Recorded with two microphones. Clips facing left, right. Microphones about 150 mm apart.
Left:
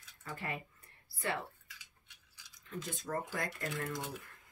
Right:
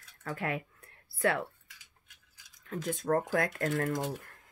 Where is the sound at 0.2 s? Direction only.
75° right (ahead or behind).